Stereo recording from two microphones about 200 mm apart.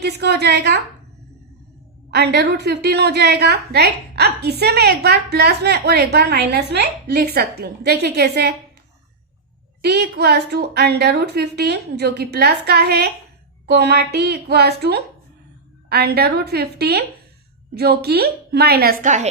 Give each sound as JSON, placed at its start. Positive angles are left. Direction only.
{"t": 0.0, "sound": "a woman's voice", "side_deg": -55}
{"t": 2.0, "sound": "a woman's voice", "side_deg": -55}
{"t": 9.8, "sound": "a woman's voice", "side_deg": -55}